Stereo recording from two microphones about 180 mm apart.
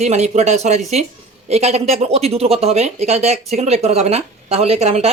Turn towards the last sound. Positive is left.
turn(degrees=-35)  # may be behind; listen again after turning